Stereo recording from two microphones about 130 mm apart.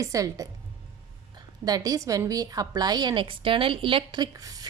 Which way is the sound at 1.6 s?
30° right (ahead or behind).